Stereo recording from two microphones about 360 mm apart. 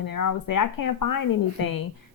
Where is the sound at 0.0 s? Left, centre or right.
Left.